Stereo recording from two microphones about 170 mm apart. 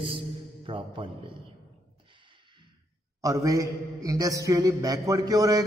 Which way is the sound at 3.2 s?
20° right (ahead or behind).